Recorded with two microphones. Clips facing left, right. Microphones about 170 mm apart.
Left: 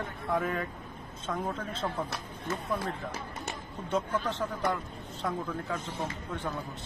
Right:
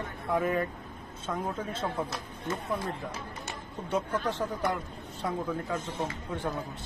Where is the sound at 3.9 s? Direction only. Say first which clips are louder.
Right 1 dB; 10° right (ahead or behind).